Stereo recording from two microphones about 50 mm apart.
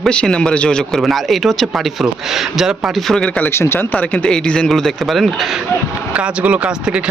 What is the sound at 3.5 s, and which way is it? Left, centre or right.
Speech, left.